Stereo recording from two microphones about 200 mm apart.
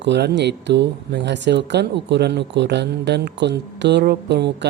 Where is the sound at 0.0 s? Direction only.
60° right (ahead or behind).